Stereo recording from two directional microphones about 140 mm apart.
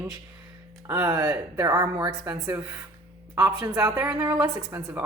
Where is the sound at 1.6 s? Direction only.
25° right (ahead or behind).